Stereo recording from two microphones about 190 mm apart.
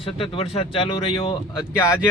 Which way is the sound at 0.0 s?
30° left (ahead or behind).